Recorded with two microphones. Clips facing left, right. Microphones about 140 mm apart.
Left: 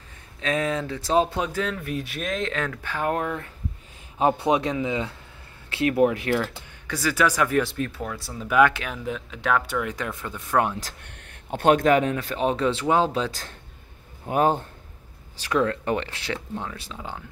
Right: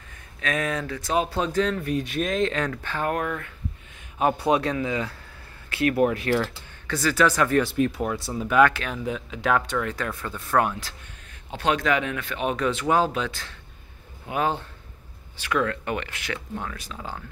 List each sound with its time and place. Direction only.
0.4 s speech: 25° left (ahead or behind)
1.3 s speech: 10° left (ahead or behind)
3.1 s speech: 20° left (ahead or behind)
7.7 s speech: 20° right (ahead or behind)
8.5 s speech: 10° left (ahead or behind)
11.2 s a man's voice: 50° left (ahead or behind); by 17.2 s 20° left (ahead or behind)